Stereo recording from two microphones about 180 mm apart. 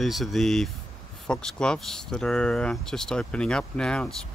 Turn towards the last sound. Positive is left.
turn(degrees=5)  # may be behind; listen again after turning